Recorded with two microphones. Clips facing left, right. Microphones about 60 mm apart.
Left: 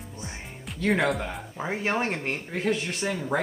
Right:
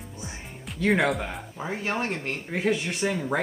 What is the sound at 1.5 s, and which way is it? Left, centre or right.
Speech, left.